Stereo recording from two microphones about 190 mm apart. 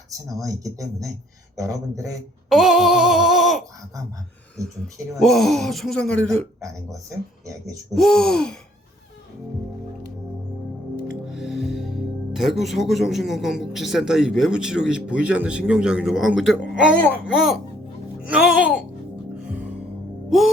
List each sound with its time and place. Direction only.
0.1 s speech: 15° right (ahead or behind)
2.5 s a sound: centre (ahead or behind)
4.6 s speech: 15° right (ahead or behind)
5.2 s speech: centre (ahead or behind)
7.9 s speech: 5° left (ahead or behind)
11.3 s speech: centre (ahead or behind)
19.4 s music: 5° right (ahead or behind)